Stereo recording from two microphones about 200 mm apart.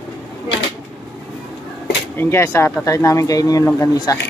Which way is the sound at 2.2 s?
10° left (ahead or behind).